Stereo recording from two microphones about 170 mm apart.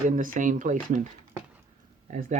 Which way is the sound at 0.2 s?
50° right (ahead or behind).